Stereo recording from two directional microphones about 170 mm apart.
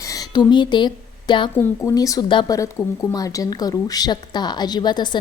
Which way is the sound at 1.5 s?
15° left (ahead or behind).